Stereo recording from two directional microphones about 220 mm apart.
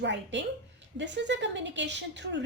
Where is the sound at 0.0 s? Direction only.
55° right (ahead or behind).